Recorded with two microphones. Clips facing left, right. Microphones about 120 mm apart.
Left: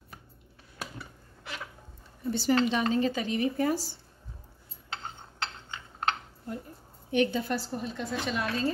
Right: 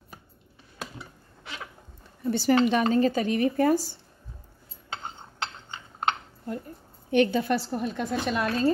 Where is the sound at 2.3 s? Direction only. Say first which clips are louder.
Right 4 dB; 60° right (ahead or behind).